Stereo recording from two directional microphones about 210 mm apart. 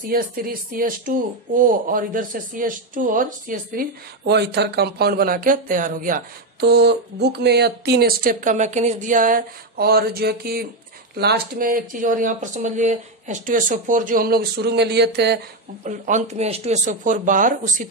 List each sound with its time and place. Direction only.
0.1 s speech: 45° right (ahead or behind)
4.2 s speech: 55° right (ahead or behind)
15.8 s speech: 35° right (ahead or behind)